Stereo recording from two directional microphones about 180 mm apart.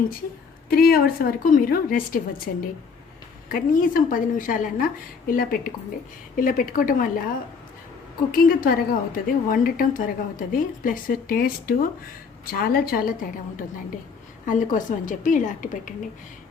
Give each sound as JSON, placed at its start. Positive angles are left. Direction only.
{"t": 0.7, "sound": "a woman's voice", "side_deg": 55}
{"t": 8.3, "sound": "a woman's voice", "side_deg": 55}
{"t": 14.4, "sound": "a woman's voice", "side_deg": 50}